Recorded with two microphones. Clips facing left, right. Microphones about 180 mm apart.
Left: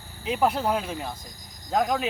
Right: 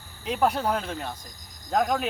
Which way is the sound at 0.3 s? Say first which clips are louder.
Left 1 dB; 5° left (ahead or behind).